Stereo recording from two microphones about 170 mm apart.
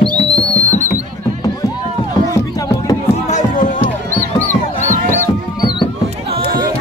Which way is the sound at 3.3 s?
50° left (ahead or behind).